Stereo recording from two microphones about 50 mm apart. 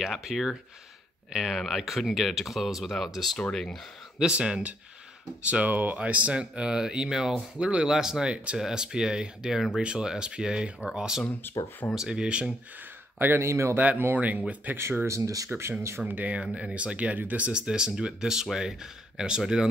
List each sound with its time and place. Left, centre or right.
0.2 s speech: centre
4.2 s speech: centre
13.4 s speech: right
13.7 s speech: right
15.0 s speech: right
16.3 s speech: right
17.5 s speech: centre